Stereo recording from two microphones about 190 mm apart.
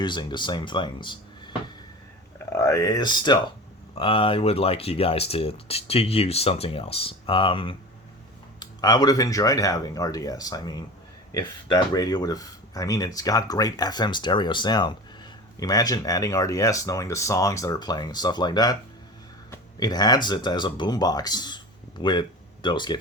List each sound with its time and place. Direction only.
0.0 s speech: 25° left (ahead or behind)